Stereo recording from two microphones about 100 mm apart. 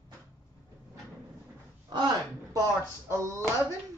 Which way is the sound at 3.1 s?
30° right (ahead or behind).